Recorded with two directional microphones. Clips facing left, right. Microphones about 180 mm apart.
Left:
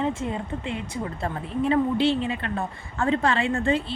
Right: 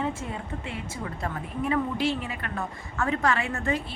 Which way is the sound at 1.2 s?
30° left (ahead or behind).